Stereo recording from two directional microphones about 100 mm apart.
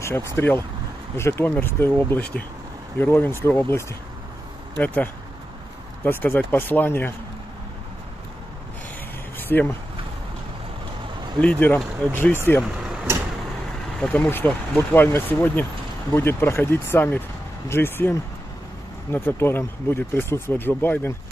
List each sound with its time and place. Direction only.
0.0 s speech: 25° left (ahead or behind)
9.5 s speech: 20° left (ahead or behind)
11.3 s speech: 15° left (ahead or behind)
12.6 s speech: 10° right (ahead or behind)
13.9 s speech: 10° left (ahead or behind)